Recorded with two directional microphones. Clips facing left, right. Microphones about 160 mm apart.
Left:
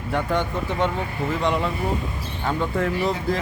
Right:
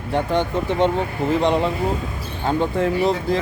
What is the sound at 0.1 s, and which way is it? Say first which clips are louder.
Speech: right 3 dB; 30° right (ahead or behind).